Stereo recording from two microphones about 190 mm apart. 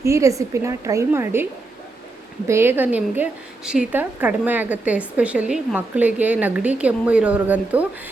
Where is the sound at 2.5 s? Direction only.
10° right (ahead or behind).